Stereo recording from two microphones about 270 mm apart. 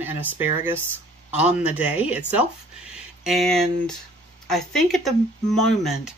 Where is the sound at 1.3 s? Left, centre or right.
Centre.